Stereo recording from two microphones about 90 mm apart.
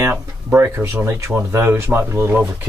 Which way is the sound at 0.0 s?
30° right (ahead or behind).